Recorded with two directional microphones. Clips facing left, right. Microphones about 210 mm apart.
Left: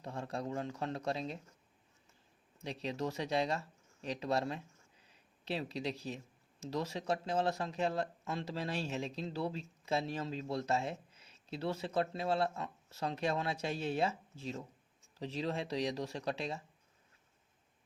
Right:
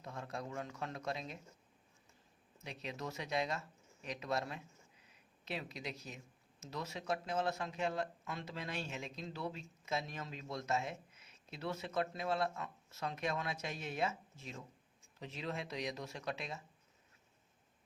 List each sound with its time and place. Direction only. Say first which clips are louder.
0.0 s speech: left 5 dB; 30° left (ahead or behind)
2.6 s speech: left 7 dB; 30° left (ahead or behind)